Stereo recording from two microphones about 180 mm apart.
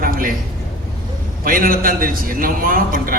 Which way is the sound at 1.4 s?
50° right (ahead or behind).